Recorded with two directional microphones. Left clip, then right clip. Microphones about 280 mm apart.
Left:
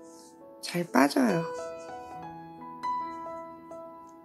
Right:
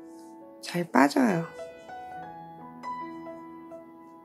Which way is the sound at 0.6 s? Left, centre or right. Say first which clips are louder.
Right 2 dB; centre.